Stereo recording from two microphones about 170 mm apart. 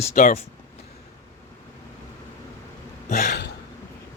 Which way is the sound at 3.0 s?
45° left (ahead or behind).